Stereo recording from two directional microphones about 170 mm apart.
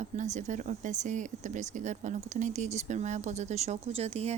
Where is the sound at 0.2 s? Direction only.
45° right (ahead or behind).